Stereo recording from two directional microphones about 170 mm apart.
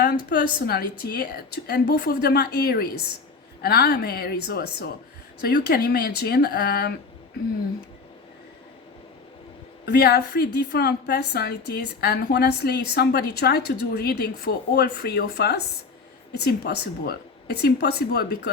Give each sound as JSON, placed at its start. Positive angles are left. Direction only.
{"t": 0.0, "sound": "a woman's voice", "side_deg": 70}
{"t": 9.8, "sound": "a woman's voice", "side_deg": 65}